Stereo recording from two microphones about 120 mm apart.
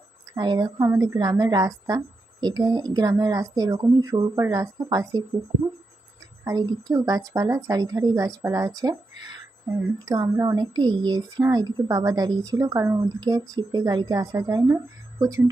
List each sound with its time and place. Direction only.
0.3 s speech: 35° right (ahead or behind)
6.4 s a woman's voice: 30° right (ahead or behind)
10.1 s speech: 30° right (ahead or behind)